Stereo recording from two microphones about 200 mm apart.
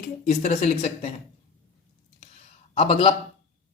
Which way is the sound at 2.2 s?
35° left (ahead or behind).